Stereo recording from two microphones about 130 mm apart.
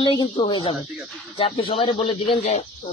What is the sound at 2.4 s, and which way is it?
Speech, 60° left (ahead or behind).